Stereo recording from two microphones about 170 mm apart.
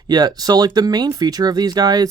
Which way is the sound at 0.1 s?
25° right (ahead or behind).